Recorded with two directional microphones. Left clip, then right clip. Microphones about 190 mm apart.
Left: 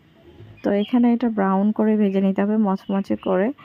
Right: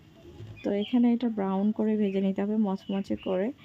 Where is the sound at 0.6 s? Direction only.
25° left (ahead or behind).